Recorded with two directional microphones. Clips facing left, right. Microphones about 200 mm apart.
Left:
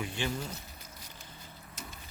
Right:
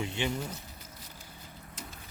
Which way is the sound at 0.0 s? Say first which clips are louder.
Right 2 dB; 25° right (ahead or behind).